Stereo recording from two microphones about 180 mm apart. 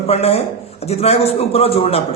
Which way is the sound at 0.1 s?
35° left (ahead or behind).